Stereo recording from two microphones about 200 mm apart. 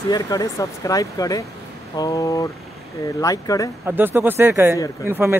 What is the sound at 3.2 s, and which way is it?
Speech, 15° left (ahead or behind).